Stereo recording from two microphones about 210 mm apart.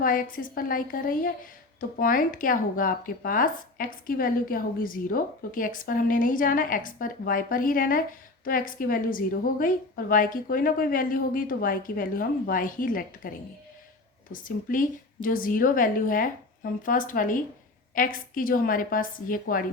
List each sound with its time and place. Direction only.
0.0 s speech: 40° left (ahead or behind)
14.3 s a woman's voice: 40° left (ahead or behind)